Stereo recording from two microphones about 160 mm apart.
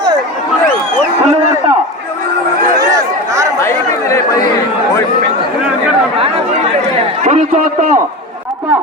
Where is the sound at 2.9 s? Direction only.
20° right (ahead or behind).